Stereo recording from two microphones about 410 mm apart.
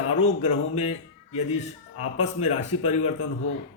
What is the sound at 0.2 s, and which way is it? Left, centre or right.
A man's voice, centre.